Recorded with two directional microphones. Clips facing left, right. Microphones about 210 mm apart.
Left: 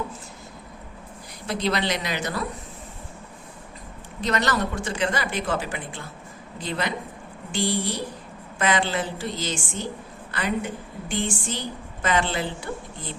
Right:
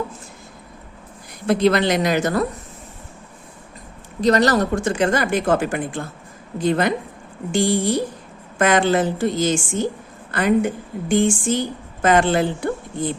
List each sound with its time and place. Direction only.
1.5 s a woman's voice: 55° right (ahead or behind)
4.2 s a woman's voice: 40° right (ahead or behind)